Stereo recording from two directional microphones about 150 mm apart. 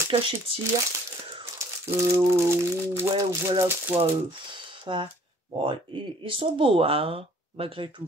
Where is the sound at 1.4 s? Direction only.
15° right (ahead or behind).